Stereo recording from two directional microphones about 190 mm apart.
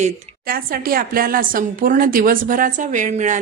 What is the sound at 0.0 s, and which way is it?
A woman's voice, 50° right (ahead or behind).